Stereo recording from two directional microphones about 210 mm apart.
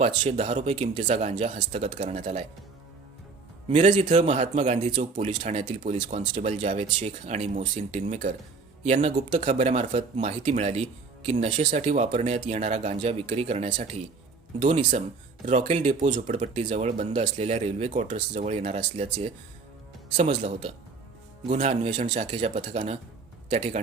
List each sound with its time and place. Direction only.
0.0 s speech: 30° right (ahead or behind)
3.7 s speech: 35° right (ahead or behind)
20.1 s speech: 35° right (ahead or behind)